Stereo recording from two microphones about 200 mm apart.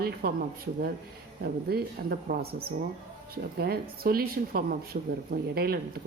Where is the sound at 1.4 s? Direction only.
50° right (ahead or behind).